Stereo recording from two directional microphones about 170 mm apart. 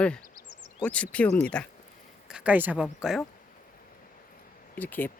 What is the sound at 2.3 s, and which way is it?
Speech, 5° right (ahead or behind).